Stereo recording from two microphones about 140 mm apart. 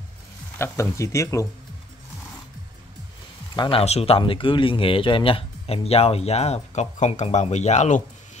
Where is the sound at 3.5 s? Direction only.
40° left (ahead or behind).